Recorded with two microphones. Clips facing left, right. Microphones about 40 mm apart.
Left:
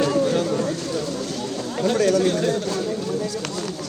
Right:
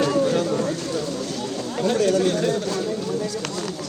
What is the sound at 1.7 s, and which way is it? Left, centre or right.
Speech, left.